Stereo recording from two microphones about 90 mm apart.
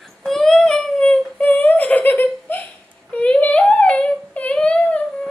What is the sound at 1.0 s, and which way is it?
Whimper, 15° left (ahead or behind).